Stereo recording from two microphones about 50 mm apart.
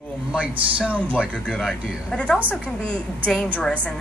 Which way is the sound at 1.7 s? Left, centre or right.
Centre.